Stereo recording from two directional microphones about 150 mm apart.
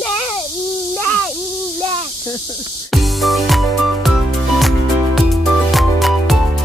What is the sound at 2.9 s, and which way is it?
Music, centre (ahead or behind).